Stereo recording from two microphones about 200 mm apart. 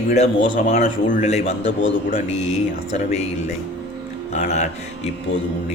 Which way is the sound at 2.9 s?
30° left (ahead or behind).